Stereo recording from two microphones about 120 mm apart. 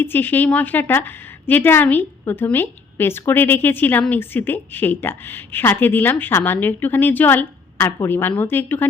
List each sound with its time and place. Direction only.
0.0 s a woman's voice: 15° left (ahead or behind)